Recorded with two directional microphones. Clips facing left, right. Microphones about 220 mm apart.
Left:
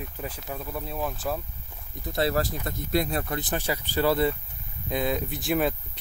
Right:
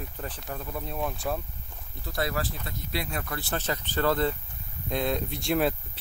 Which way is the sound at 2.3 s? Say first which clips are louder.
Left 5 dB; 45° left (ahead or behind).